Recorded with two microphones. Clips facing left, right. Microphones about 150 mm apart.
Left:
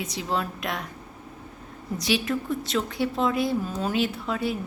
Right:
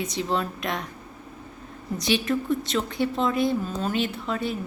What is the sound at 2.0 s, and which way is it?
A woman's voice, 5° left (ahead or behind).